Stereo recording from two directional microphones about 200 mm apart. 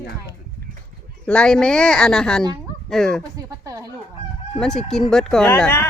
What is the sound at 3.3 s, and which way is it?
Speech, 15° right (ahead or behind).